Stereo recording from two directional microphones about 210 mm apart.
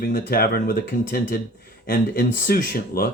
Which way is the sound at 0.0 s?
45° left (ahead or behind).